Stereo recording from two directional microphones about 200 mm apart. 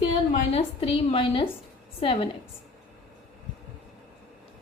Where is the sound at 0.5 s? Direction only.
30° left (ahead or behind).